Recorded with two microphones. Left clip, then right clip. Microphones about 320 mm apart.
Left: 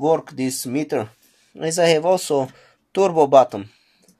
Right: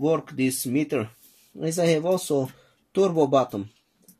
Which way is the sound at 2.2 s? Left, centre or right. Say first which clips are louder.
Left 5 dB; left.